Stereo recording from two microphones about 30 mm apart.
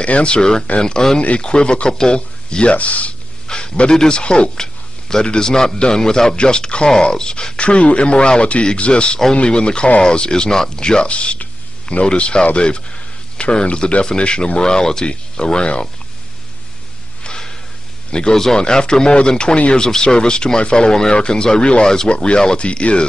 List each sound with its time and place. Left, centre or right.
0.0 s speech: left
0.4 s speech: left
1.9 s speech: left
2.1 s speech: left
2.7 s speech: left
3.4 s a sound: left
3.9 s speech: left
4.2 s speech: left
5.4 s speech: left
7.5 s speech: left
18.3 s speech: centre
18.6 s speech: left
21.8 s speech: left
22.1 s speech: left